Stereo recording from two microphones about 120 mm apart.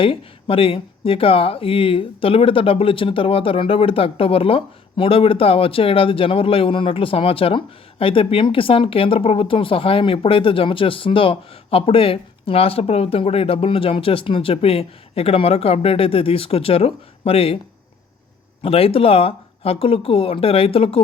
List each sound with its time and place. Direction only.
0.0 s speech: 50° left (ahead or behind)
18.6 s speech: 55° left (ahead or behind)